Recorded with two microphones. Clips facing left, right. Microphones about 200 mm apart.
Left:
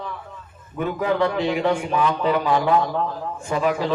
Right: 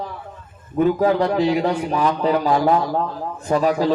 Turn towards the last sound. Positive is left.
turn(degrees=-40)  # may be behind; listen again after turning